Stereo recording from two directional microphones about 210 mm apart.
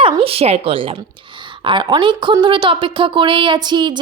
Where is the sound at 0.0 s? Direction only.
25° right (ahead or behind).